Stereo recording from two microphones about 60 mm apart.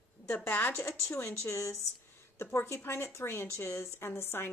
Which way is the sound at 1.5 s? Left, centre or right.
Left.